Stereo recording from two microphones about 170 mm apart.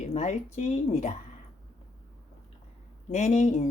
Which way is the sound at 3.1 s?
45° left (ahead or behind).